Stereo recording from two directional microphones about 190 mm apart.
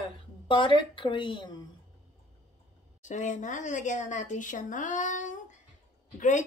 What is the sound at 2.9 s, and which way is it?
Speech, 40° left (ahead or behind).